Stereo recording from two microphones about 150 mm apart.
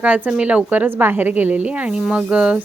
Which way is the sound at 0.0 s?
10° right (ahead or behind).